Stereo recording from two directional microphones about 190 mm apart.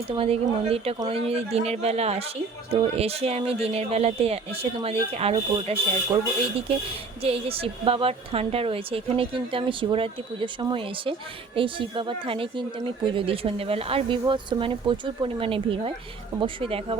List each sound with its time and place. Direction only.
0.1 s speech: 30° right (ahead or behind)
7.2 s speech: 30° right (ahead or behind)